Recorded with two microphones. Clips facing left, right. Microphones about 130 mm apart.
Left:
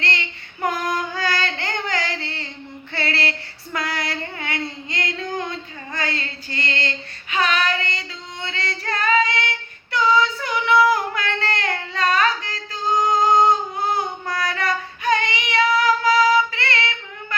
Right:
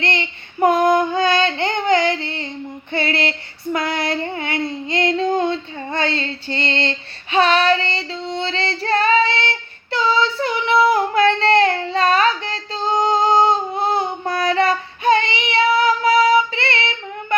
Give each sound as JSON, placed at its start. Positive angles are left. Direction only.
{"t": 0.0, "sound": "child singing", "side_deg": -20}
{"t": 2.9, "sound": "female singing", "side_deg": -20}